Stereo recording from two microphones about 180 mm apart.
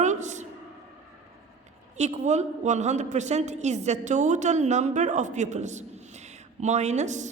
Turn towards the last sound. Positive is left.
turn(degrees=-40)  # may be behind; listen again after turning